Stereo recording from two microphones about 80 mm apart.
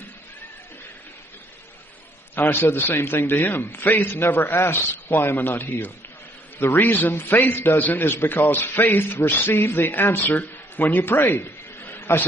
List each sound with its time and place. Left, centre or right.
2.3 s a man's voice: left